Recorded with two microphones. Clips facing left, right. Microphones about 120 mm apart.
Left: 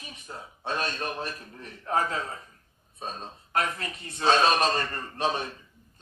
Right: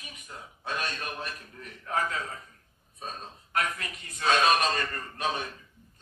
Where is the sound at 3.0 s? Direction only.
30° left (ahead or behind).